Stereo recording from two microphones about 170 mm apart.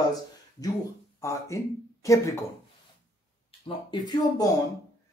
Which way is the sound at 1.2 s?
15° left (ahead or behind).